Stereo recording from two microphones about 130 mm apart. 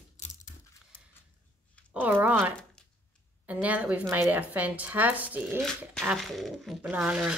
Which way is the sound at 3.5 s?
10° right (ahead or behind).